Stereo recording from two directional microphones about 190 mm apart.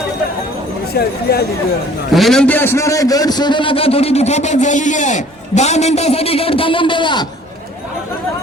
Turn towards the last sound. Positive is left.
turn(degrees=25)  # may be behind; listen again after turning